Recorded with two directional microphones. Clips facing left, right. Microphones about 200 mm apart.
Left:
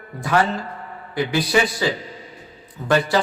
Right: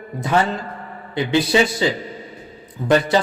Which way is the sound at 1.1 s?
25° right (ahead or behind).